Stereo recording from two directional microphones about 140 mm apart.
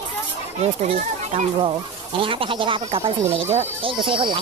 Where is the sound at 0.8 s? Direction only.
45° right (ahead or behind).